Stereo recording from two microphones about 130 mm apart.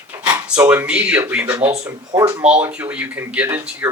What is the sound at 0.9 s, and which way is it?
Speech, 10° right (ahead or behind).